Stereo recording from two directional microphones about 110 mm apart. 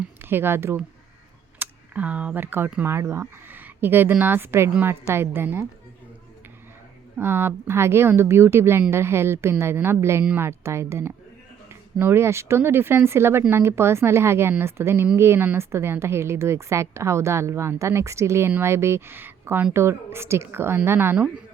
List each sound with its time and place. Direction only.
0.2 s a woman's voice: 20° right (ahead or behind)
7.2 s a woman's voice: 20° right (ahead or behind)